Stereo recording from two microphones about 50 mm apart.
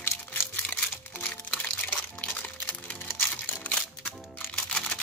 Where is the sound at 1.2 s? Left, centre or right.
Left.